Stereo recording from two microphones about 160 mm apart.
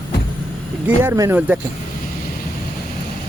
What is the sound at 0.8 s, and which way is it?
Speech, 15° right (ahead or behind).